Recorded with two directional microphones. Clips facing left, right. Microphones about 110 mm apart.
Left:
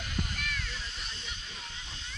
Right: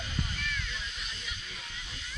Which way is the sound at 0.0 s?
55° left (ahead or behind).